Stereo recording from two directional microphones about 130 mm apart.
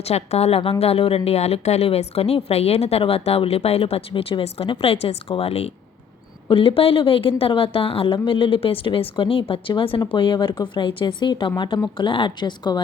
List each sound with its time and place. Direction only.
0.0 s a woman's voice: 55° left (ahead or behind); by 12.8 s 35° left (ahead or behind)